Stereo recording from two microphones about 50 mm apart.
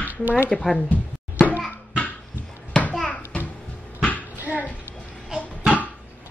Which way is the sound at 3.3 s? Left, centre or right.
Left.